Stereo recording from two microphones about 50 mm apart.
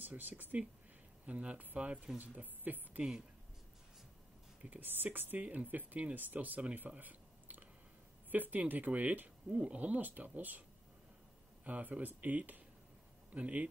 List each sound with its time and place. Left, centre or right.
0.0 s speech: right
1.2 s speech: right
2.1 s speech: right
4.6 s speech: right
6.7 s a sound: right
8.3 s speech: right
11.6 s speech: right